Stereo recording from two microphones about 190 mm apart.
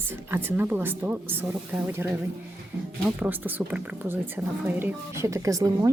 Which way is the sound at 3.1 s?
10° right (ahead or behind).